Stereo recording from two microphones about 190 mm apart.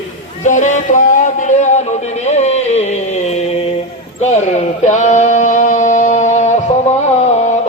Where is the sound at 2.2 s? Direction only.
35° left (ahead or behind).